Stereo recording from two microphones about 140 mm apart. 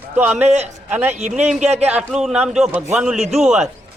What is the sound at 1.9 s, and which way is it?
Speech, 5° right (ahead or behind).